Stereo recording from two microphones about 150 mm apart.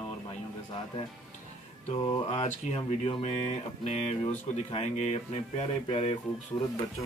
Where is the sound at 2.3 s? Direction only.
50° left (ahead or behind).